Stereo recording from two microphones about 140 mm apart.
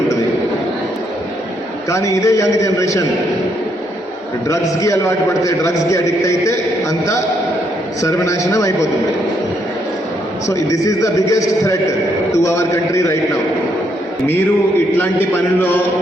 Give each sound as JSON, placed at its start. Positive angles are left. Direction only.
{"t": 1.9, "sound": "a man's voice", "side_deg": 25}
{"t": 4.4, "sound": "a man's voice", "side_deg": 25}
{"t": 8.0, "sound": "a man's voice", "side_deg": 20}
{"t": 10.4, "sound": "a man's voice", "side_deg": 25}